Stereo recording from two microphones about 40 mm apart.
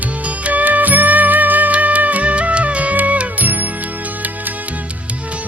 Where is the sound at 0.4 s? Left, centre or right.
Right.